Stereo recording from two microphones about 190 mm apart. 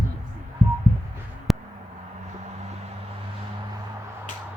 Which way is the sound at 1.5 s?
Centre (ahead or behind).